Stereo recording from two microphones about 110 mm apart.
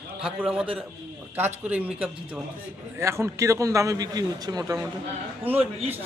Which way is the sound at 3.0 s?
25° right (ahead or behind).